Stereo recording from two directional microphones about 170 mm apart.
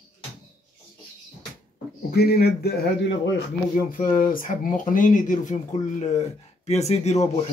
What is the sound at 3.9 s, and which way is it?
Speech, 55° left (ahead or behind).